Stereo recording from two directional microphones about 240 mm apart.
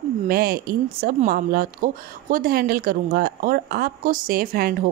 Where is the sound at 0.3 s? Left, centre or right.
Right.